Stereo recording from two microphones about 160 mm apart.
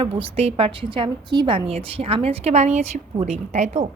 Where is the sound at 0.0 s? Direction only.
35° right (ahead or behind).